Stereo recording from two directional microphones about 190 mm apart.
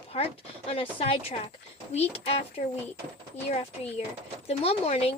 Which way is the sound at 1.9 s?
35° left (ahead or behind).